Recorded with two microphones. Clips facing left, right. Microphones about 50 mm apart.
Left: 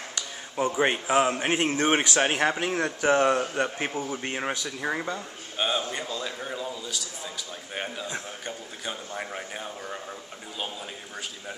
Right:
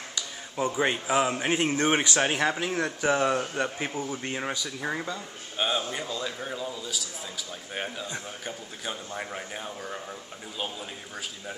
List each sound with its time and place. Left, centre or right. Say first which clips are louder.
0.6 s a man's voice: left 2 dB; centre
3.3 s a man's voice: left 3 dB; centre